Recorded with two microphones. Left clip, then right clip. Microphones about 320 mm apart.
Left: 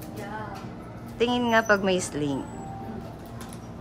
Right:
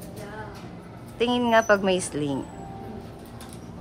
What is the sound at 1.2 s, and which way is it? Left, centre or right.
A woman's voice, centre.